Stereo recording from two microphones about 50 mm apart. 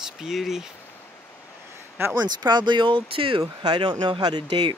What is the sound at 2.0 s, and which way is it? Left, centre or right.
Speech, right.